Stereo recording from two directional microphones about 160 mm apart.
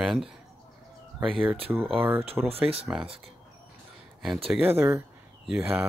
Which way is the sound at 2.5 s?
40° right (ahead or behind).